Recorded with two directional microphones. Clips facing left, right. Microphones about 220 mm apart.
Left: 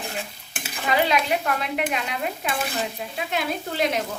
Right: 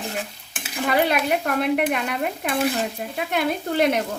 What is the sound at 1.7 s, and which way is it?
Stir, 50° right (ahead or behind).